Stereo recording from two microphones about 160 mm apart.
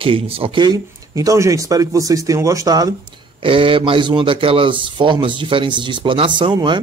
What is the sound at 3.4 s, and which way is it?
A man's voice, 35° right (ahead or behind).